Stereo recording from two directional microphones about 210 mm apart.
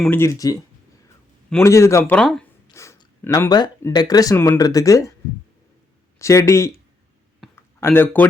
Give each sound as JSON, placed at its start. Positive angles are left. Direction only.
{"t": 0.0, "sound": "speech", "side_deg": 10}
{"t": 2.6, "sound": "speech", "side_deg": 15}
{"t": 6.1, "sound": "speech", "side_deg": 15}
{"t": 7.5, "sound": "a sound", "side_deg": 10}